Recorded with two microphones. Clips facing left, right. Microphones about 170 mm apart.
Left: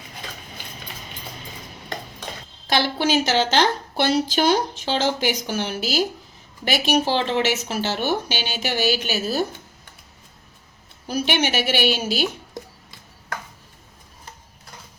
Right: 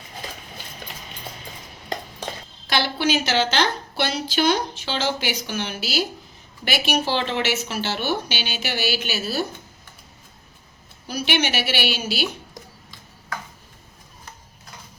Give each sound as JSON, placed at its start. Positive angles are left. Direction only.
{"t": 2.6, "sound": "a woman's voice", "side_deg": 45}
{"t": 11.1, "sound": "a woman's voice", "side_deg": 45}